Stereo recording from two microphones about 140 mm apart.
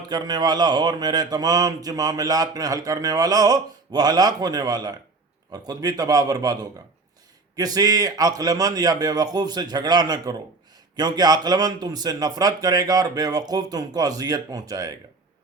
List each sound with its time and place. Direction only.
0.1 s speech: 30° right (ahead or behind)